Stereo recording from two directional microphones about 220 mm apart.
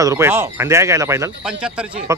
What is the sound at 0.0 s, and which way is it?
Speech, 15° right (ahead or behind).